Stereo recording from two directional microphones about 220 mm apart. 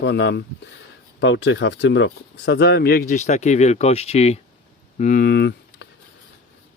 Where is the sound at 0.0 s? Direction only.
50° left (ahead or behind).